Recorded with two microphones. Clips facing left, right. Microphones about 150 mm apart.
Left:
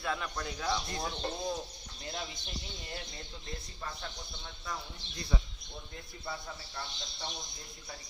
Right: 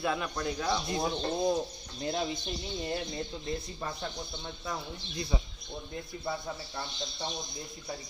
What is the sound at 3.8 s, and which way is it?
Speech, 25° right (ahead or behind).